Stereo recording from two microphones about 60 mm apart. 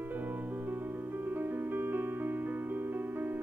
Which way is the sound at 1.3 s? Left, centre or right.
Right.